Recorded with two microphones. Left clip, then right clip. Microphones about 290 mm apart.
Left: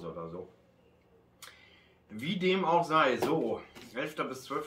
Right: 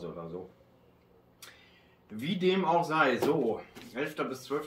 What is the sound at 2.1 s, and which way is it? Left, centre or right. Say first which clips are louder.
Speech: right 1 dB; centre.